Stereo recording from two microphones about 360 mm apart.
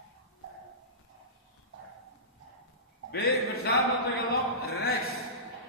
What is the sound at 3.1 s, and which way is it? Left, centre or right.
Speech, left.